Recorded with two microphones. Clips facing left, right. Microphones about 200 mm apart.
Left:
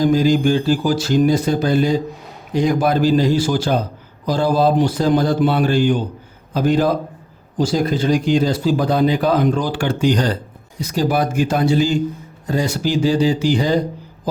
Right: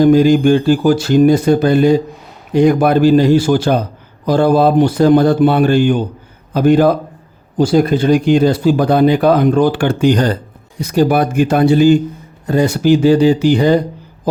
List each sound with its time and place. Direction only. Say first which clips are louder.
0.0 s a man's voice: right 6 dB; 60° right (ahead or behind)